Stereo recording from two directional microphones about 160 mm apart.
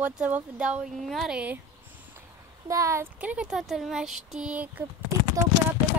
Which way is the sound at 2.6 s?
20° right (ahead or behind).